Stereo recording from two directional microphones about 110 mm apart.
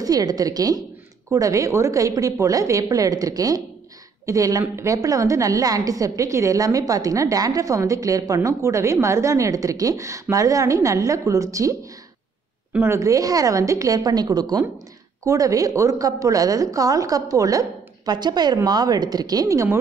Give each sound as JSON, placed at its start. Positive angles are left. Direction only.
{"t": 0.0, "sound": "a woman's voice", "side_deg": -35}
{"t": 12.7, "sound": "a woman's voice", "side_deg": -25}